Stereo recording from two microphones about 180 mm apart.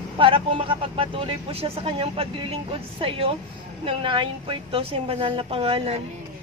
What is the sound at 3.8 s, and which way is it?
Speech, 30° right (ahead or behind).